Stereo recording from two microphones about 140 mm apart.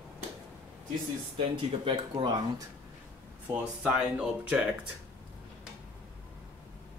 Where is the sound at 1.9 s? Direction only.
30° right (ahead or behind).